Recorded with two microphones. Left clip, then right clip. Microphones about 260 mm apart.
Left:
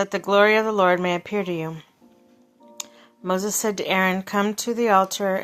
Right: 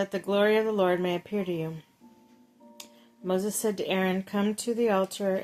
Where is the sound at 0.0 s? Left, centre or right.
Centre.